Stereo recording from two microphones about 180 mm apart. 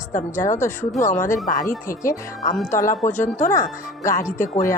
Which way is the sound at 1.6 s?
50° left (ahead or behind).